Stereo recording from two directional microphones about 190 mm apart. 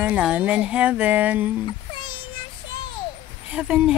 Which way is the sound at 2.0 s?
25° left (ahead or behind).